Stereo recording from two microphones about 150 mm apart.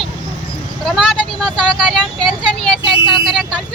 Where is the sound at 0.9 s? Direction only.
Centre (ahead or behind).